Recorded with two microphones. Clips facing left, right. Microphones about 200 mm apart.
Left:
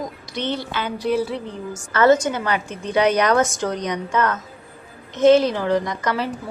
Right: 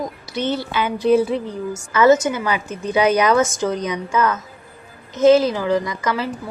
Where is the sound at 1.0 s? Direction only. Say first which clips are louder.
Right 6 dB; 25° right (ahead or behind).